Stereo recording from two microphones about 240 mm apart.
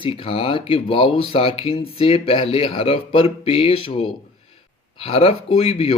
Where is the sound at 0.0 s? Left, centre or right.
Left.